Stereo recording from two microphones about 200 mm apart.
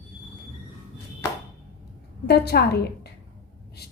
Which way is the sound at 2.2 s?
55° left (ahead or behind).